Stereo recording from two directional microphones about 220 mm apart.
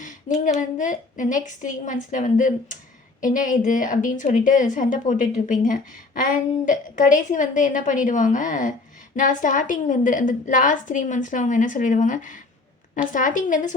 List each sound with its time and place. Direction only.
0.6 s a woman's voice: 35° left (ahead or behind)